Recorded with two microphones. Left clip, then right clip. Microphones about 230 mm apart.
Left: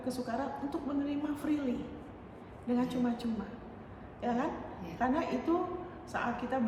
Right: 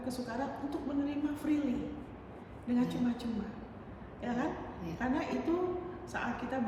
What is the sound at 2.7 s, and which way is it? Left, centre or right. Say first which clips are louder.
A woman's voice: left 1 dB; centre.